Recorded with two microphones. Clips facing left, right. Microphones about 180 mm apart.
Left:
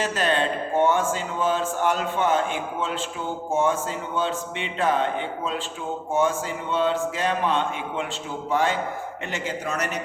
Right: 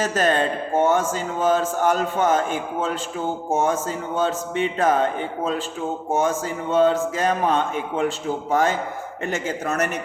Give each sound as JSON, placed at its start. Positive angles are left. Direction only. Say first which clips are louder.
{"t": 0.0, "sound": "a man's voice", "louder": "right 3 dB", "side_deg": -45}
{"t": 6.1, "sound": "a man's voice", "louder": "even", "side_deg": -45}